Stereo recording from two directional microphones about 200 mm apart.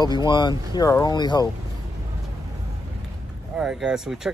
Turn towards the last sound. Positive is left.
turn(degrees=0)  # may be behind; listen again after turning